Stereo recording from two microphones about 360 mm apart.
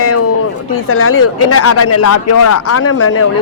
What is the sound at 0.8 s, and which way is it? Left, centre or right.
Speech, left.